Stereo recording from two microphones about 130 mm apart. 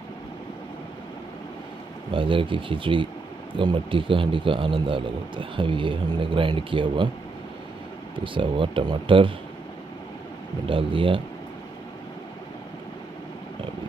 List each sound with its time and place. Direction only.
2.0 s a man's voice: 40° right (ahead or behind)
8.2 s a man's voice: 40° right (ahead or behind)
10.7 s speech: 45° right (ahead or behind)